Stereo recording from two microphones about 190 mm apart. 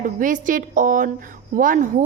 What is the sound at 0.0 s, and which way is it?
A woman's voice, 45° right (ahead or behind).